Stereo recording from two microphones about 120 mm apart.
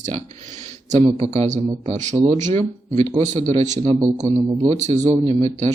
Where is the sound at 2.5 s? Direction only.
60° right (ahead or behind).